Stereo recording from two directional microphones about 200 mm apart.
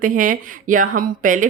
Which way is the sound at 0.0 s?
40° right (ahead or behind).